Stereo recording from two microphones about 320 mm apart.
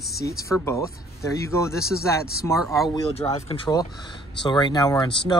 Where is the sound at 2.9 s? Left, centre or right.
Centre.